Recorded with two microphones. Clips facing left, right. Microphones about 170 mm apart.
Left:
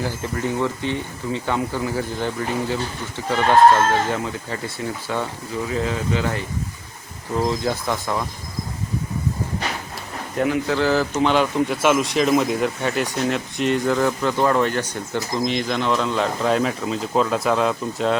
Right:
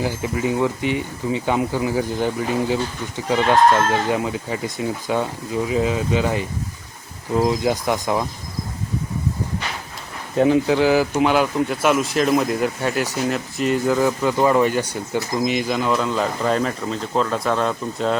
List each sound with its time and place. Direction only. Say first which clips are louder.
0.0 s speech: right 3 dB; 10° right (ahead or behind)
4.1 s speech: right 3 dB; 15° right (ahead or behind)
10.3 s speech: right 5 dB; 25° right (ahead or behind); by 18.2 s centre (ahead or behind)